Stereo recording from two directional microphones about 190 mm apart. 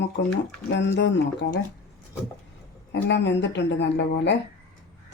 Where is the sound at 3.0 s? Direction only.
65° left (ahead or behind).